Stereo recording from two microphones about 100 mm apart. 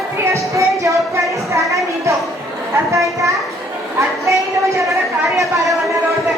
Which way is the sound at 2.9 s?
30° right (ahead or behind).